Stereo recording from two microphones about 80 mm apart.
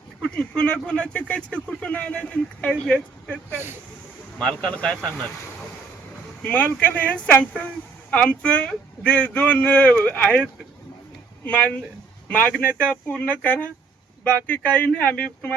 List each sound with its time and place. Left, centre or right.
0.3 s speech: centre
3.5 s speech: right
4.4 s speech: centre
6.4 s speech: left
11.4 s speech: centre